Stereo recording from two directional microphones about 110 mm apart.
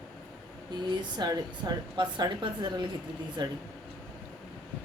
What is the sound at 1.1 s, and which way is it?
Speech, 40° right (ahead or behind).